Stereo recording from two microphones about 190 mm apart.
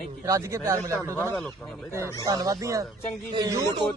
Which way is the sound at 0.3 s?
15° right (ahead or behind).